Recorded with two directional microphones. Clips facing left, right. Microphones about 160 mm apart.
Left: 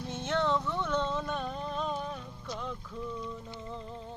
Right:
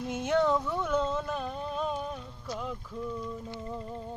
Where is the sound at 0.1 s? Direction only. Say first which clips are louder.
Right 4 dB; 10° right (ahead or behind).